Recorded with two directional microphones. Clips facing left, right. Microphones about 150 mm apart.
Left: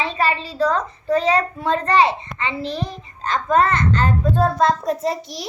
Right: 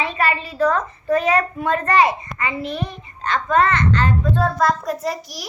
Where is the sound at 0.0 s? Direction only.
30° left (ahead or behind).